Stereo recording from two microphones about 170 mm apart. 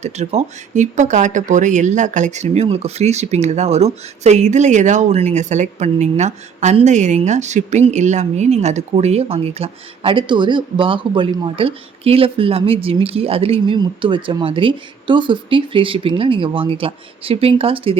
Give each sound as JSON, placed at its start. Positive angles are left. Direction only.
{"t": 0.0, "sound": "speech", "side_deg": -40}